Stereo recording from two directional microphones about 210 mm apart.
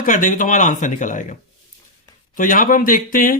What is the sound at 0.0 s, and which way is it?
Speech, 40° left (ahead or behind).